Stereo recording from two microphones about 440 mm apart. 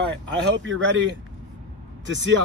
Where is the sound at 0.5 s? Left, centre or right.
Right.